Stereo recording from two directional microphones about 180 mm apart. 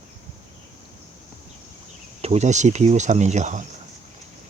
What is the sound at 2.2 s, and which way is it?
Speech, 40° right (ahead or behind).